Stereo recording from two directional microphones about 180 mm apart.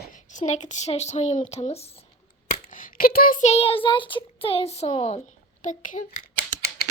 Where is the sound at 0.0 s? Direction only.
45° left (ahead or behind).